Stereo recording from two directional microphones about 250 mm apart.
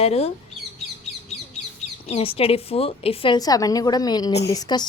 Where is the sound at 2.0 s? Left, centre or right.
Left.